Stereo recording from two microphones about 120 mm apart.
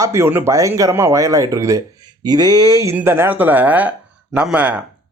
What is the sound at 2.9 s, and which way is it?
Speech, 20° right (ahead or behind).